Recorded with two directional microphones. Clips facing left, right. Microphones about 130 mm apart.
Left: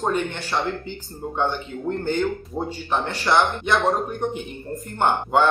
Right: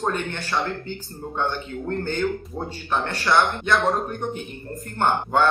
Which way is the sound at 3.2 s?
15° left (ahead or behind).